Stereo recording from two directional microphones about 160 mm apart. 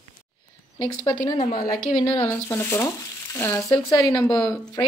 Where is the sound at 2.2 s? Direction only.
15° left (ahead or behind).